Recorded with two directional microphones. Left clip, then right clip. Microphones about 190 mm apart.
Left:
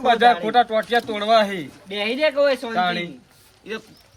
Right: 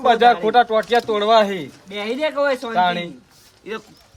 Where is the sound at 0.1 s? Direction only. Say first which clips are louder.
Right 2 dB; 30° right (ahead or behind).